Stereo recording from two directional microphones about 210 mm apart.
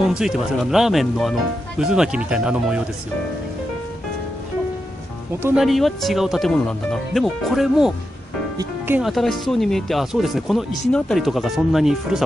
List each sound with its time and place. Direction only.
0.0 s speech: centre (ahead or behind)
5.4 s speech: 5° right (ahead or behind)